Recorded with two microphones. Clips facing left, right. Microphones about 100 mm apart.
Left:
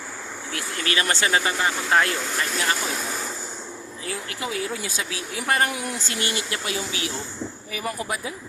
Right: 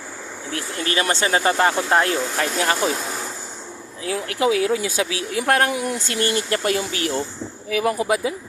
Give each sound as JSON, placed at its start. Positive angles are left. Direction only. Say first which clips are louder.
{"t": 0.5, "sound": "speech", "louder": "right 3 dB", "side_deg": -30}
{"t": 2.4, "sound": "speech", "louder": "right 3 dB", "side_deg": -45}
{"t": 4.1, "sound": "speech", "louder": "right 11 dB", "side_deg": -80}
{"t": 6.1, "sound": "speech", "louder": "right 8 dB", "side_deg": -45}
{"t": 7.8, "sound": "speech", "louder": "right 9 dB", "side_deg": -90}